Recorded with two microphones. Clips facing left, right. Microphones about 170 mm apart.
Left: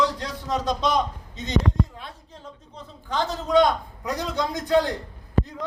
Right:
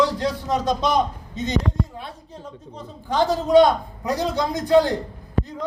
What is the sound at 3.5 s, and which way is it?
A man's voice, 30° right (ahead or behind).